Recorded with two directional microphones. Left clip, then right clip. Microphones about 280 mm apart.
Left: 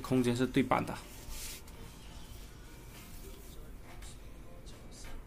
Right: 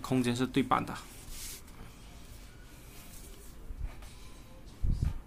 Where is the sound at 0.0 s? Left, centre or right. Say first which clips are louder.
Even; centre.